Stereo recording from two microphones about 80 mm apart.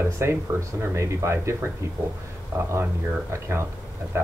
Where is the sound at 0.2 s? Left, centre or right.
Right.